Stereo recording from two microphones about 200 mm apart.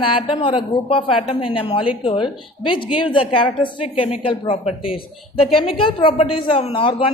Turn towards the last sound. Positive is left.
turn(degrees=25)  # may be behind; listen again after turning